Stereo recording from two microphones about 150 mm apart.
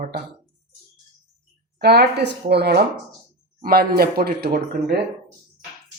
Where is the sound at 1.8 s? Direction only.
90° right.